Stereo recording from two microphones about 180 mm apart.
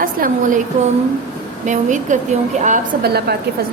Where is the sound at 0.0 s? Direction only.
50° right (ahead or behind).